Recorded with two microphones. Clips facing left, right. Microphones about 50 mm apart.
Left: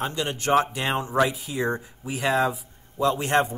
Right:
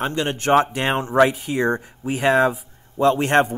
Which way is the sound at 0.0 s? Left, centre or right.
Right.